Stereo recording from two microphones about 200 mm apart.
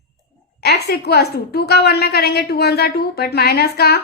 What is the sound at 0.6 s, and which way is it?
A woman's voice, 55° left (ahead or behind).